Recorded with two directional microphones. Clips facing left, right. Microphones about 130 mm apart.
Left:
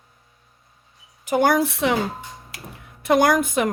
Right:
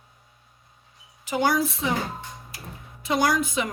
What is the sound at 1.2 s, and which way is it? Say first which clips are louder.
Speech: left 5 dB; 50° left (ahead or behind).